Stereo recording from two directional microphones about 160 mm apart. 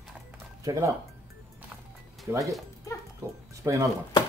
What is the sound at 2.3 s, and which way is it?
Speech, 15° right (ahead or behind).